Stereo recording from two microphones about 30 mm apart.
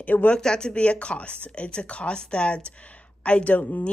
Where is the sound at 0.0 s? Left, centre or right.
Left.